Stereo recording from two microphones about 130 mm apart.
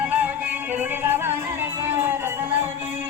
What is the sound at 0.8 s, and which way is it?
Music, 15° right (ahead or behind).